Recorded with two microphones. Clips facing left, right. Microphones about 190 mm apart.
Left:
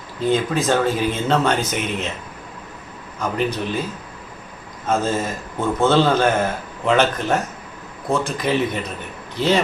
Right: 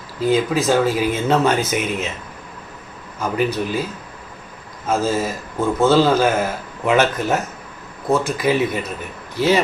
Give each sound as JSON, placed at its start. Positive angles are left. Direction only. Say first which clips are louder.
{"t": 0.2, "sound": "speech", "louder": "right 2 dB", "side_deg": -5}
{"t": 3.2, "sound": "speech", "louder": "right 2 dB", "side_deg": -5}
{"t": 4.9, "sound": "speech", "louder": "right 1 dB", "side_deg": -5}